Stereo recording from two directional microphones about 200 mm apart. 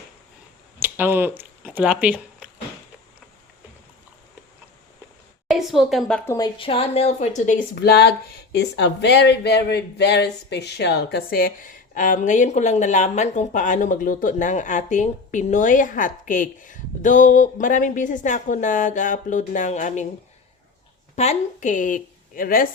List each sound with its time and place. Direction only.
0.8 s speech: 10° right (ahead or behind)
5.5 s a woman's voice: centre (ahead or behind)
6.3 s speech: 25° left (ahead or behind)
7.8 s speech: 55° left (ahead or behind); by 20.1 s 35° left (ahead or behind)
21.2 s speech: 35° left (ahead or behind)